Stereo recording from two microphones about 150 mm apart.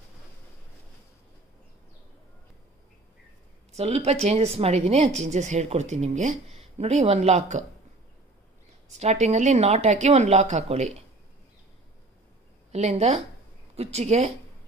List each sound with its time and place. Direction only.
3.7 s speech: 45° right (ahead or behind)
8.9 s speech: 50° right (ahead or behind)
12.7 s speech: 45° right (ahead or behind)